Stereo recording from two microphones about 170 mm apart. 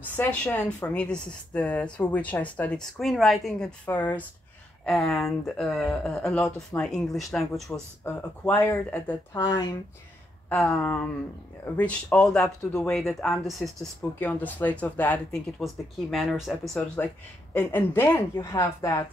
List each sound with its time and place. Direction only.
0.1 s speech: 10° left (ahead or behind)
8.0 s speech: 15° left (ahead or behind)
9.3 s speech: 25° left (ahead or behind)
10.5 s speech: 5° left (ahead or behind)
16.7 s speech: 15° left (ahead or behind)